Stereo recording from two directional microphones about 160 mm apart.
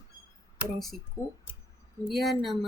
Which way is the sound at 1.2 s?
20° left (ahead or behind).